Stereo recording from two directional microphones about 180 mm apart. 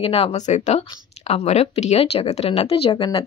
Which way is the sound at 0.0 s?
30° left (ahead or behind).